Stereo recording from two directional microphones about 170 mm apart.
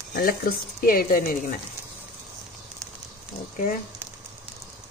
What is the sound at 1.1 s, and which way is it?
Speech, 55° left (ahead or behind).